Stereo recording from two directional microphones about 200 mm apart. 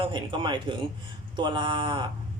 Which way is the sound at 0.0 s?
25° right (ahead or behind).